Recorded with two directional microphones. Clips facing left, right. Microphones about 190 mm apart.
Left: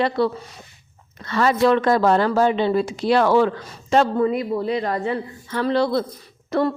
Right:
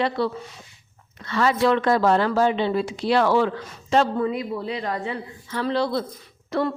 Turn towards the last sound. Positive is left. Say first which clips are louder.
# left 3 dB
turn(degrees=45)  # may be behind; listen again after turning